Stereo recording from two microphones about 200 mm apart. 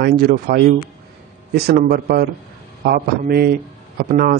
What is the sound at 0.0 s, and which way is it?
Speech, 50° right (ahead or behind).